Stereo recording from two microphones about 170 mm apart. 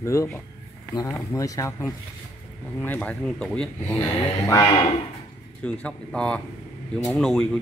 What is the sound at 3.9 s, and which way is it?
Speech, 20° left (ahead or behind).